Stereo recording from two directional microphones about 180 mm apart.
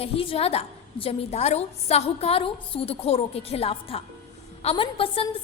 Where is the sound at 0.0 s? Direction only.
30° left (ahead or behind).